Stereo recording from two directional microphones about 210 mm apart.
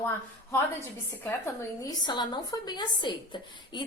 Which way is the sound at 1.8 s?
20° left (ahead or behind).